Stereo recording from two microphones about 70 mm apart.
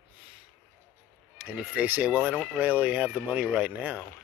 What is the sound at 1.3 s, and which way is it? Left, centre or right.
Speech, centre.